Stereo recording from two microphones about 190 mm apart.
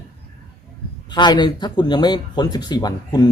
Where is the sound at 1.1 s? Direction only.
25° left (ahead or behind).